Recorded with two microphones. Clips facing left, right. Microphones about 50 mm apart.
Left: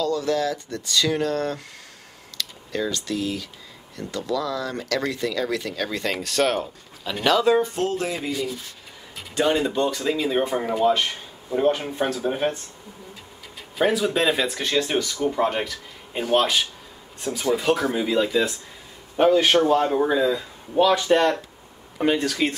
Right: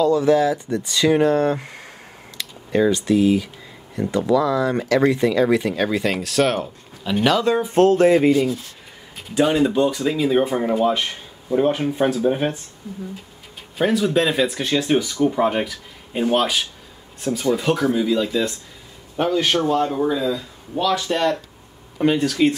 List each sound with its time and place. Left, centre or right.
0.0 s speech: centre
5.9 s speech: centre
7.7 s rub: right
9.3 s speech: centre
13.7 s speech: centre
17.9 s speech: centre
21.9 s speech: centre